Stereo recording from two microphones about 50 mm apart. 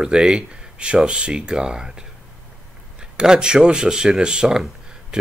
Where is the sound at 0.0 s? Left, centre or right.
Centre.